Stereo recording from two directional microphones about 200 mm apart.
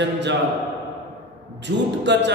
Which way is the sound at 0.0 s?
60° right (ahead or behind).